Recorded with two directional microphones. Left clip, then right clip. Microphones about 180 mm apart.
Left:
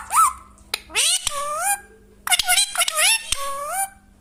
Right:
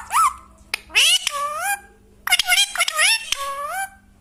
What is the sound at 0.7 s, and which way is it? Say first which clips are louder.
Finger snapping: right 5 dB; 15° left (ahead or behind).